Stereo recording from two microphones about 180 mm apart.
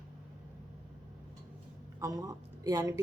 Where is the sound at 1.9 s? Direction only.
15° right (ahead or behind).